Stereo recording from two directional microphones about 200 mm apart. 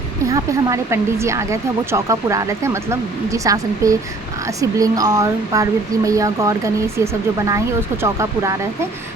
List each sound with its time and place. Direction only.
0.3 s speech: 15° right (ahead or behind)